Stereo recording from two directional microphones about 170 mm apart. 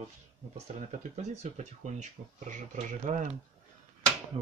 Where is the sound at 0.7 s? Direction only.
45° right (ahead or behind).